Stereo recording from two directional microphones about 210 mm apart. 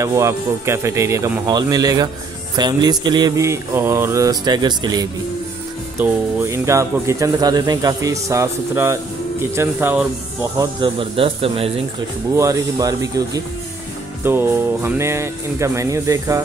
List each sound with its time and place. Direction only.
0.0 s speech: 15° right (ahead or behind)
2.5 s mantra: 20° right (ahead or behind)
5.9 s speech: 10° right (ahead or behind)
10.6 s mantra: 25° right (ahead or behind)
12.4 s speech: 15° right (ahead or behind)